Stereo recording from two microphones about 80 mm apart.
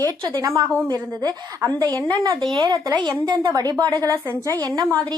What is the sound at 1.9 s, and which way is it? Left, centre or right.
Speech, right.